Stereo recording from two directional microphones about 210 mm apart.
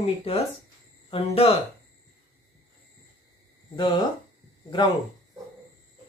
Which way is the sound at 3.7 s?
20° left (ahead or behind).